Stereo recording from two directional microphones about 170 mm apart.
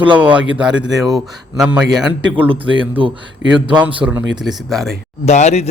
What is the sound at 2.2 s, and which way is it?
Speech, 30° right (ahead or behind).